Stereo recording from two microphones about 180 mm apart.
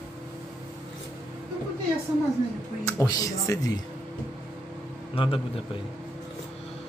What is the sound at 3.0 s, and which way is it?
Speech, 20° left (ahead or behind).